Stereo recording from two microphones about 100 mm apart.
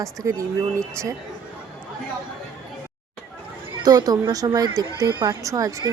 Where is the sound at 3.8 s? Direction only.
40° right (ahead or behind).